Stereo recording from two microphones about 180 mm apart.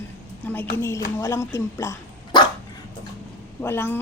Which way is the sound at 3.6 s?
15° left (ahead or behind).